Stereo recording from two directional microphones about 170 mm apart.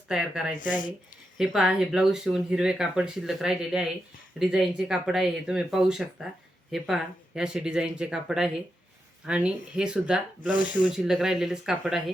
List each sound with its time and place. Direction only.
0.1 s speech: 5° right (ahead or behind)
0.5 s speech: 50° left (ahead or behind)
1.4 s speech: 5° right (ahead or behind)
10.5 s speech: 50° left (ahead or behind)
10.9 s speech: 5° right (ahead or behind)